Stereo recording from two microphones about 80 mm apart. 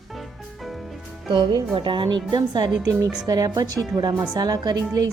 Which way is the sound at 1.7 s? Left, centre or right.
Right.